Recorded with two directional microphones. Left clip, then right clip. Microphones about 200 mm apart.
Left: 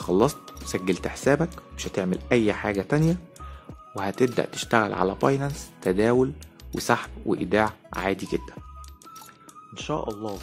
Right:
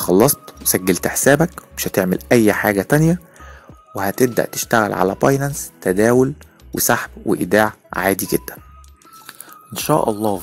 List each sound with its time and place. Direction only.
0.0 s speech: 40° right (ahead or behind)
9.8 s speech: 55° right (ahead or behind)